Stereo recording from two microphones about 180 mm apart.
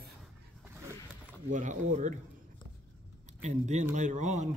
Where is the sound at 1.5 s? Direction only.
45° right (ahead or behind).